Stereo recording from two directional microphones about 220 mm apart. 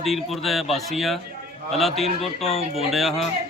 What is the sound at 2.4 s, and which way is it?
Speech, 30° left (ahead or behind).